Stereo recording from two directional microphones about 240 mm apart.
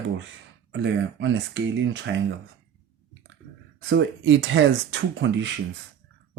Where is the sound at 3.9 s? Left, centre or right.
Right.